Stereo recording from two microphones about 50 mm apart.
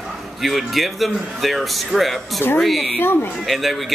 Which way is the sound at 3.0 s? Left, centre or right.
Left.